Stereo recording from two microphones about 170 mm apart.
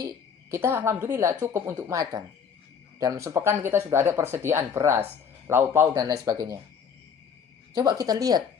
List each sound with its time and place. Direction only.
0.5 s a man's voice: 15° right (ahead or behind)
7.8 s a man's voice: 25° right (ahead or behind)